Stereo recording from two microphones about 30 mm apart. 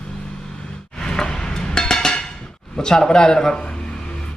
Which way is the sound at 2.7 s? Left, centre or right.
Centre.